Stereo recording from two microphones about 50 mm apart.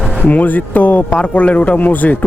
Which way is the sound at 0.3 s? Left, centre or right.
Left.